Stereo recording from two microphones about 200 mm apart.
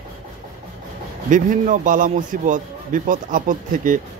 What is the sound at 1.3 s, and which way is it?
Speech, 40° right (ahead or behind).